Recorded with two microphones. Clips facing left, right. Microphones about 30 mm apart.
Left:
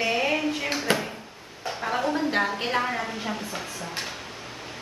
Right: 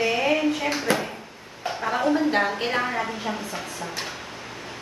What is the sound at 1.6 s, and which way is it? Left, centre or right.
A woman's voice, centre.